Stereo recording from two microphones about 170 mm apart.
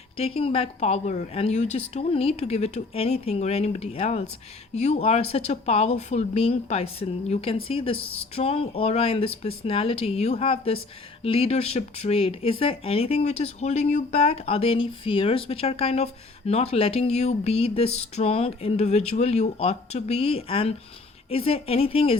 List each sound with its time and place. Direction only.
0.2 s speech: 35° left (ahead or behind)